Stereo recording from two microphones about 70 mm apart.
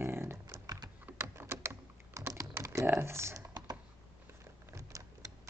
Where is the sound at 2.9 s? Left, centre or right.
Right.